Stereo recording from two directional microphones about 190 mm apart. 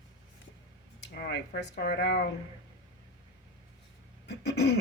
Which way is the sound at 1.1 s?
60° left (ahead or behind).